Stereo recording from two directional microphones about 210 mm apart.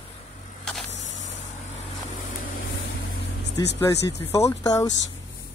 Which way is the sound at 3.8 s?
10° left (ahead or behind).